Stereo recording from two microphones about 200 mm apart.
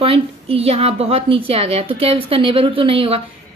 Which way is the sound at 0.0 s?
30° right (ahead or behind).